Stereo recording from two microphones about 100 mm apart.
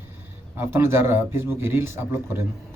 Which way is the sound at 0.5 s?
25° right (ahead or behind).